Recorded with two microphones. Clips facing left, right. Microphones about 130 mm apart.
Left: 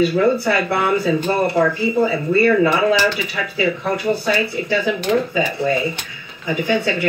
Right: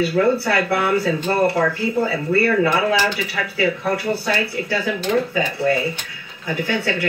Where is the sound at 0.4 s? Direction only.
20° left (ahead or behind).